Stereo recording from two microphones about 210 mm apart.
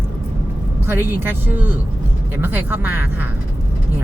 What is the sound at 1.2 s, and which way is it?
Speech, 10° right (ahead or behind).